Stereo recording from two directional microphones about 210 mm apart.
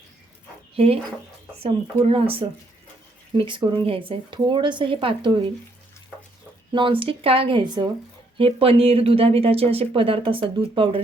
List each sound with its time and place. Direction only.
1.5 s speech: 30° right (ahead or behind)
6.7 s speech: 25° right (ahead or behind)